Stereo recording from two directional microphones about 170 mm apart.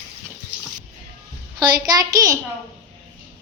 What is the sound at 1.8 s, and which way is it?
Speech, 20° right (ahead or behind).